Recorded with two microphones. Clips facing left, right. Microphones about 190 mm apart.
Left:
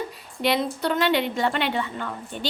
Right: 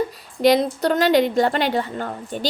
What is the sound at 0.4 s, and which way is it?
A woman's voice, 40° right (ahead or behind).